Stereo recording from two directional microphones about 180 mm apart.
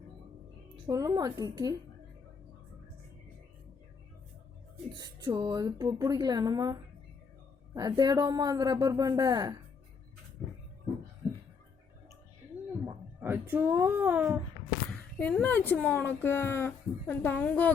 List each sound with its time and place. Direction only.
0.9 s a woman's voice: 20° right (ahead or behind)
4.9 s a woman's voice: 20° right (ahead or behind)
10.4 s a sound: 5° left (ahead or behind)
12.8 s a woman's voice: 15° right (ahead or behind)
15.2 s speech: 10° left (ahead or behind)